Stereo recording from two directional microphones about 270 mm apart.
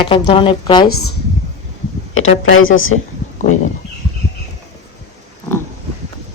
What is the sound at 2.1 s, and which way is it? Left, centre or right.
Speech, left.